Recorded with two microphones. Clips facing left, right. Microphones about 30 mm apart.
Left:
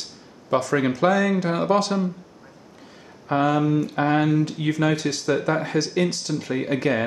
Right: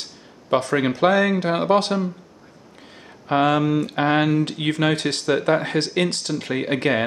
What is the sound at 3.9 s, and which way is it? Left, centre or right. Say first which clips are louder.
Speech: right 1 dB; right.